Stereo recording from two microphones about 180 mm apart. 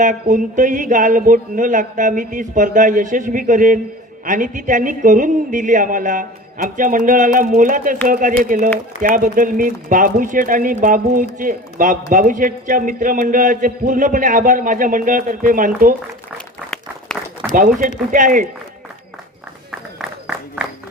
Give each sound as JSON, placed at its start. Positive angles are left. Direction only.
{"t": 0.0, "sound": "a man's voice", "side_deg": -45}
{"t": 16.7, "sound": "run", "side_deg": 5}
{"t": 17.7, "sound": "a man's voice", "side_deg": -45}
{"t": 20.0, "sound": "a sound", "side_deg": -5}